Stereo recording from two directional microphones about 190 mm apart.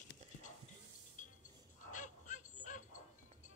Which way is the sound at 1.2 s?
40° left (ahead or behind).